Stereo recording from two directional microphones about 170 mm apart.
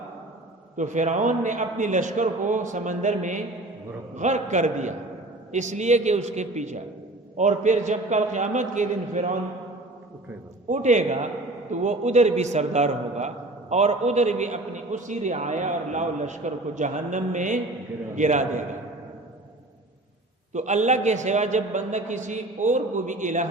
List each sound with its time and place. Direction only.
0.8 s a man's voice: 45° right (ahead or behind)
10.7 s a man's voice: 45° right (ahead or behind)
20.5 s a man's voice: 45° right (ahead or behind)